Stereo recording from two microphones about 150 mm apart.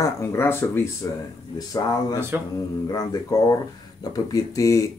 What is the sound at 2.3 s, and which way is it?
Speech, 15° right (ahead or behind).